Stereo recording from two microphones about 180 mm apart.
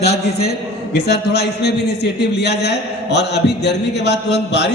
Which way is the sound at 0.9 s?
65° left (ahead or behind).